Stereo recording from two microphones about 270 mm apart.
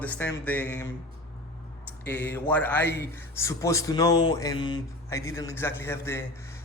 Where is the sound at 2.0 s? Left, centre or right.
Centre.